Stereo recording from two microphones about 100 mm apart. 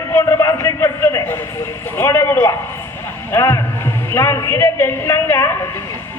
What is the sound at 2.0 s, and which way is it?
A woman's voice, 25° left (ahead or behind).